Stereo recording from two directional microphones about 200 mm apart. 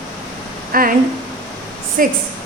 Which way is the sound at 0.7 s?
45° right (ahead or behind).